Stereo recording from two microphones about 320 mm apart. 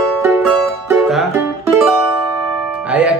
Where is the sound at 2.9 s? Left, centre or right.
Centre.